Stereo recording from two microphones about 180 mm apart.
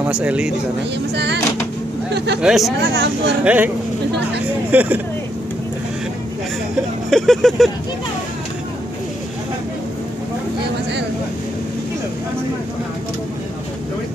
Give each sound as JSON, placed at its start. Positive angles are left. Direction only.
{"t": 0.0, "sound": "speech", "side_deg": -5}
{"t": 1.1, "sound": "speech", "side_deg": -70}
{"t": 2.4, "sound": "speech", "side_deg": 0}
{"t": 2.8, "sound": "speech", "side_deg": -75}
{"t": 3.4, "sound": "speech", "side_deg": -10}
{"t": 7.1, "sound": "speech", "side_deg": 0}